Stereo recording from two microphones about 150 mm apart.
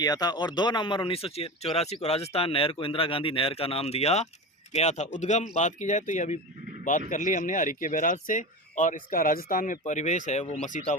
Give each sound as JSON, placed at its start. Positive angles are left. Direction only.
{"t": 0.0, "sound": "speech", "side_deg": 25}